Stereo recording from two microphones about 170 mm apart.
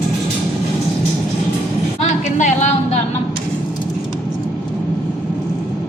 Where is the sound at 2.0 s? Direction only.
45° left (ahead or behind).